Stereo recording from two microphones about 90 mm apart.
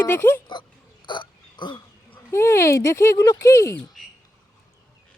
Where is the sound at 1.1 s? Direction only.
60° left (ahead or behind).